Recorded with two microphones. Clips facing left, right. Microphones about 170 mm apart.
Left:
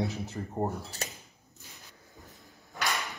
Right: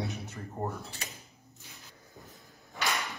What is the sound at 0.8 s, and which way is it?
Speech, 40° left (ahead or behind).